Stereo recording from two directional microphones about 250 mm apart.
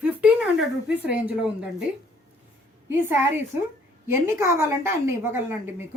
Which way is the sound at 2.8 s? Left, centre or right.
Centre.